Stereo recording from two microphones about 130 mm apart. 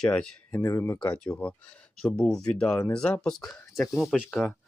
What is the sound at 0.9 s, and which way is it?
Speech, 10° left (ahead or behind).